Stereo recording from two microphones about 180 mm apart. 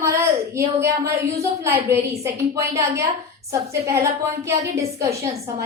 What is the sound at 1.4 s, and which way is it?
A woman's voice, 15° right (ahead or behind).